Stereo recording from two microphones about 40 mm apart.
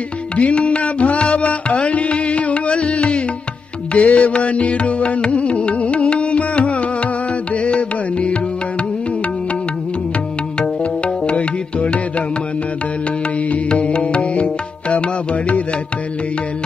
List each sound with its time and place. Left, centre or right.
0.4 s music: left
10.8 s music: left
13.7 s music: left